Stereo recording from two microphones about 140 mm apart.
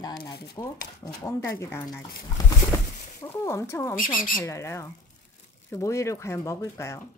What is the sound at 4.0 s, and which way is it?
Speech, 80° left.